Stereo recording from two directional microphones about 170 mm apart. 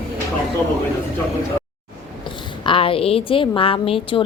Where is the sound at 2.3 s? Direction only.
30° left (ahead or behind).